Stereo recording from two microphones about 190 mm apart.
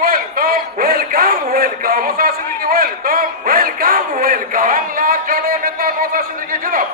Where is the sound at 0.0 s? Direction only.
50° right (ahead or behind).